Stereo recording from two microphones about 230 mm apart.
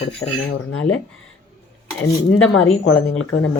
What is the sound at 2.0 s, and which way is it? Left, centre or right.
Speech, left.